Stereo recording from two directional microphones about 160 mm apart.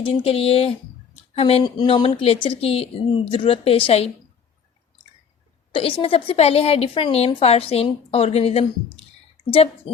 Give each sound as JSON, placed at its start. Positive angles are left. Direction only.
{"t": 0.0, "sound": "a woman's voice", "side_deg": 35}
{"t": 5.7, "sound": "a woman's voice", "side_deg": 35}